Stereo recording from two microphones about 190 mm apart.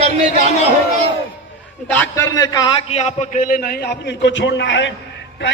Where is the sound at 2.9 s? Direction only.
35° left (ahead or behind).